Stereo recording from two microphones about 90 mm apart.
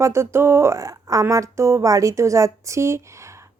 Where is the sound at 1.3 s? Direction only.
35° right (ahead or behind).